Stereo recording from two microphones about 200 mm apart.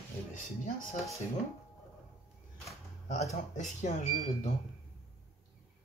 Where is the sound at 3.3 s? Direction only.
35° left (ahead or behind).